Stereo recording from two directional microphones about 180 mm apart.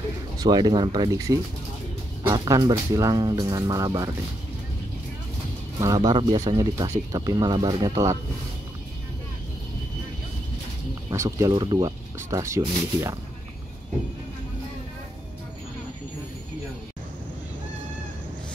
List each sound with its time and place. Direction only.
0.4 s speech: 20° right (ahead or behind)
5.8 s speech: 20° right (ahead or behind)
11.1 s speech: 15° right (ahead or behind)